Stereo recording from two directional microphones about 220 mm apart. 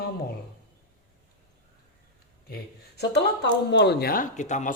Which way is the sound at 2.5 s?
50° left (ahead or behind).